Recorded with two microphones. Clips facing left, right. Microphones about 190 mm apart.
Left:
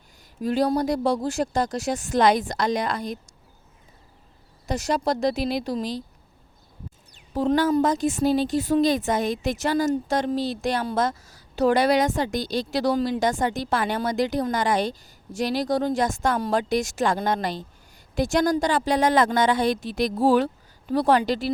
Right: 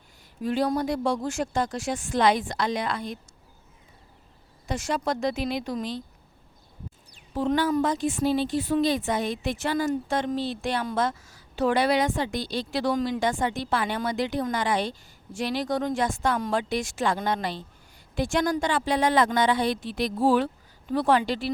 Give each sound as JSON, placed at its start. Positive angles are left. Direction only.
{"t": 0.4, "sound": "speech", "side_deg": 40}
{"t": 4.6, "sound": "speech", "side_deg": 40}
{"t": 7.3, "sound": "speech", "side_deg": 40}